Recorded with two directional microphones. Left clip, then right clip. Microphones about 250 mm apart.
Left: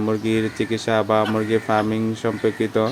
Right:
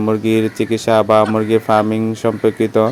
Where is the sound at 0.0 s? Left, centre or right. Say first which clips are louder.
Right 6 dB; right.